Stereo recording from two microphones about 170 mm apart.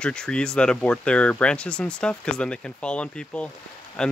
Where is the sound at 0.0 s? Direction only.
5° left (ahead or behind).